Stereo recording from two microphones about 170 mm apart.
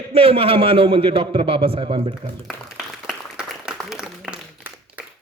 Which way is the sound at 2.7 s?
5° right (ahead or behind).